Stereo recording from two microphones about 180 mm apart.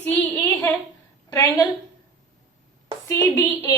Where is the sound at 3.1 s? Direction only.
15° left (ahead or behind).